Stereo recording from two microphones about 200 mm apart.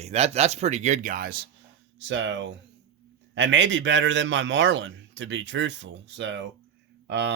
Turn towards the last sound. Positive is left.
turn(degrees=-60)  # may be behind; listen again after turning